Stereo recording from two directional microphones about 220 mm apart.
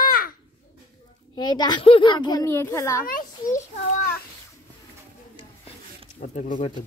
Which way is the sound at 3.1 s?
40° left (ahead or behind).